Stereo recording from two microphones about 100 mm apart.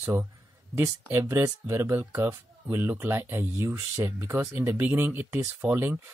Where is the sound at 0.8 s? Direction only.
25° right (ahead or behind).